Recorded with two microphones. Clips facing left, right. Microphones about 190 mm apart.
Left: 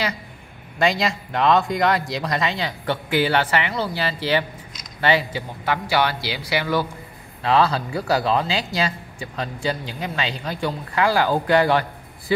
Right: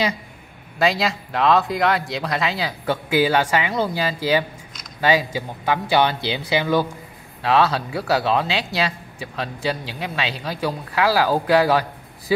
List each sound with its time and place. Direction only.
0.7 s a man's voice: centre (ahead or behind)
7.4 s speech: 5° right (ahead or behind)